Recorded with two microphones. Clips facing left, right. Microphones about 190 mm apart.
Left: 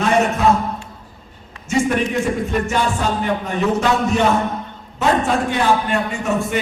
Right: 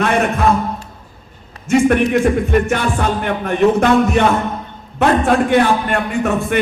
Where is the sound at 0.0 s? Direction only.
60° right (ahead or behind).